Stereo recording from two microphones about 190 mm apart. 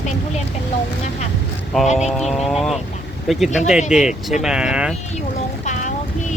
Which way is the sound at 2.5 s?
Centre (ahead or behind).